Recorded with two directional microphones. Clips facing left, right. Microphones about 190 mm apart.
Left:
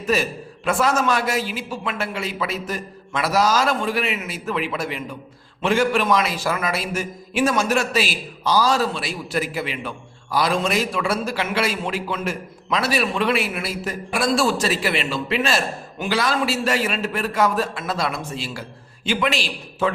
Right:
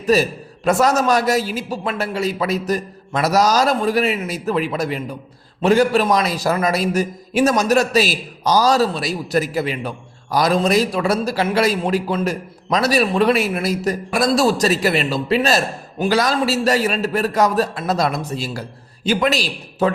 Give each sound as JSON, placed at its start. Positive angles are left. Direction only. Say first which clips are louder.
{"t": 0.0, "sound": "a man's voice", "louder": "right 5 dB", "side_deg": -35}